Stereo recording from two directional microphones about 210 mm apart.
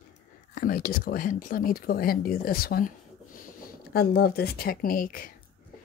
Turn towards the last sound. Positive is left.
turn(degrees=40)  # may be behind; listen again after turning